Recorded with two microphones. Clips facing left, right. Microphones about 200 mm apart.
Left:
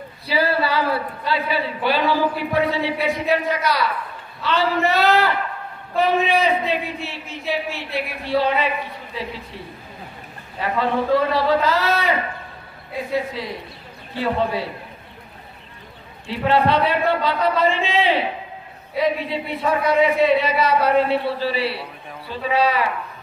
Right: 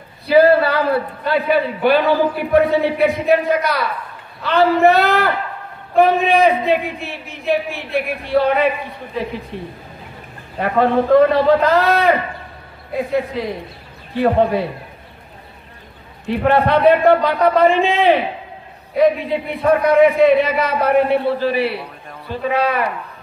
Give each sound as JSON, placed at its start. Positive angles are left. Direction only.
{"t": 0.3, "sound": "a man's voice", "side_deg": -55}
{"t": 10.6, "sound": "a man's voice", "side_deg": -50}
{"t": 13.4, "sound": "a man's voice", "side_deg": -50}
{"t": 16.3, "sound": "a man's voice", "side_deg": -55}